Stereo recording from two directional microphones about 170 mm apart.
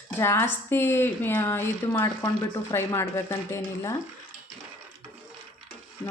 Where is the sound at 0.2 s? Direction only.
15° left (ahead or behind).